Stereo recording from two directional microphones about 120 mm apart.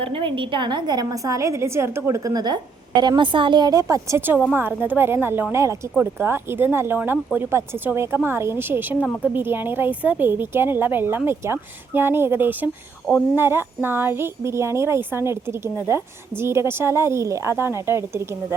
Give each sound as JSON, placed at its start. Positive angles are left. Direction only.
{"t": 0.0, "sound": "a woman's voice", "side_deg": -45}
{"t": 4.5, "sound": "a woman's voice", "side_deg": -20}